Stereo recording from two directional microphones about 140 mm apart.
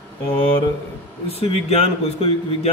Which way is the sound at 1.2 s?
45° left (ahead or behind).